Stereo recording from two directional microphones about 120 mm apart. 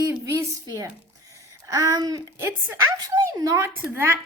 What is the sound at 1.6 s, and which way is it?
Speech, 30° right (ahead or behind).